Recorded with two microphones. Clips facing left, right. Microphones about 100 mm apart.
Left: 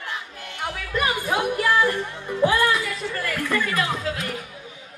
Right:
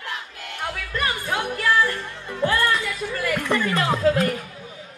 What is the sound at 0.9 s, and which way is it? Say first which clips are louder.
Music: left 3 dB; 15° left (ahead or behind).